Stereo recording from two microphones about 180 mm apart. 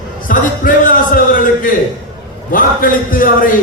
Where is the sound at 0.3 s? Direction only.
50° left (ahead or behind).